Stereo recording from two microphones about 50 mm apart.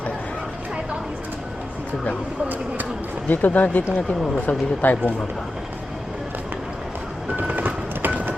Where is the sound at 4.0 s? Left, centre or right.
Centre.